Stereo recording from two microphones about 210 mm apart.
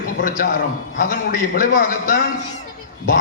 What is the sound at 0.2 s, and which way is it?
A man's voice, 40° left (ahead or behind).